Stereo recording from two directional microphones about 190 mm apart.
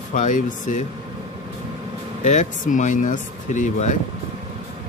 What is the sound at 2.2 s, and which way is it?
Speech, 40° left (ahead or behind).